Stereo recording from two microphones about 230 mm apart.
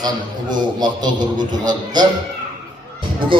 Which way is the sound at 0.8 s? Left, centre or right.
Centre.